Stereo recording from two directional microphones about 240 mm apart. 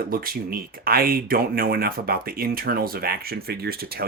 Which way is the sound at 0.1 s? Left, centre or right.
Right.